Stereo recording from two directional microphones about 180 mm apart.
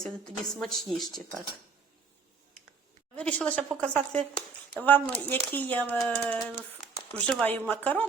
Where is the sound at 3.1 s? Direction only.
5° left (ahead or behind).